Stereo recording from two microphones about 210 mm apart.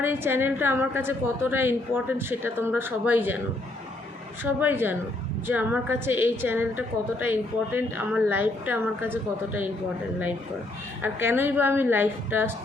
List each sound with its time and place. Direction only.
0.0 s a woman's voice: 10° right (ahead or behind)
4.4 s a woman's voice: 10° right (ahead or behind)
11.0 s a woman's voice: 10° right (ahead or behind)